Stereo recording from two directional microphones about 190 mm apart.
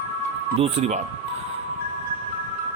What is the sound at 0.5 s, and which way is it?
Speech, 35° right (ahead or behind).